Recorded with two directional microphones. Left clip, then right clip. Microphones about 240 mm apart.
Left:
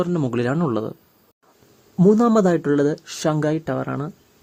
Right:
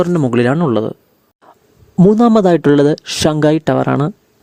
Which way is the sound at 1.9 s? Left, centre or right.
Right.